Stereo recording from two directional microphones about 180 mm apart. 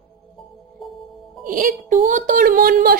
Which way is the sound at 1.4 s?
50° right (ahead or behind).